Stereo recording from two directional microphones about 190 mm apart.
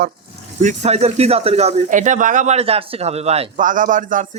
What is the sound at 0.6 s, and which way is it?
A man's voice, 40° right (ahead or behind).